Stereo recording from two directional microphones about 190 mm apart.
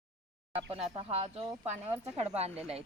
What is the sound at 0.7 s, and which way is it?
Speech, 30° right (ahead or behind).